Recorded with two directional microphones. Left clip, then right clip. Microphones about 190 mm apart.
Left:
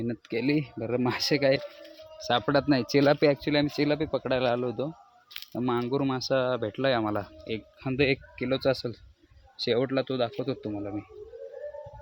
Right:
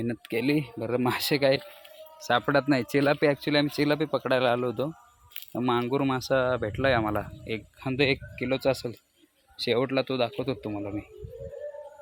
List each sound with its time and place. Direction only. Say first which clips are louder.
0.0 s speech: right 1 dB; 5° right (ahead or behind)
3.0 s speech: left 2 dB; 25° left (ahead or behind)
3.3 s speech: right 1 dB; centre (ahead or behind)